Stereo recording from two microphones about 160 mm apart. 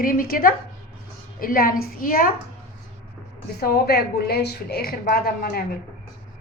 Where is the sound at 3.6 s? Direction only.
80° left.